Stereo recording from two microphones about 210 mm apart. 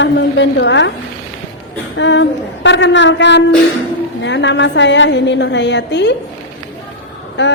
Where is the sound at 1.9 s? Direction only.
60° left (ahead or behind).